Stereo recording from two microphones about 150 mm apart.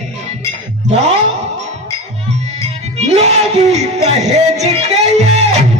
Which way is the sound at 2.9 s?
45° right (ahead or behind).